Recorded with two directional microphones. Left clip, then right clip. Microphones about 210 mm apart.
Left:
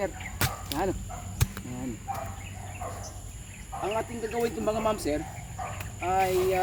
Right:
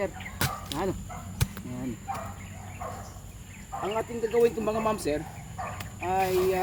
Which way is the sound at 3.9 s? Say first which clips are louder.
Right 7 dB; 5° left (ahead or behind).